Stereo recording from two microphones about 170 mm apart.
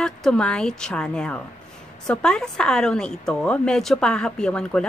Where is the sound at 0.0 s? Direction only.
5° left (ahead or behind).